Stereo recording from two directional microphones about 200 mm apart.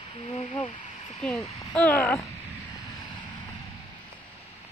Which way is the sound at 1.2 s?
5° left (ahead or behind).